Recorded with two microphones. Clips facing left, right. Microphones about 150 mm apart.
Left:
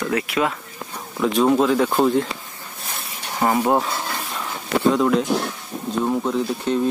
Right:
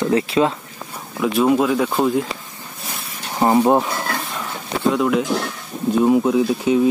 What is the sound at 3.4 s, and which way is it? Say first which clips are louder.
Speech: right 4 dB; 25° right (ahead or behind).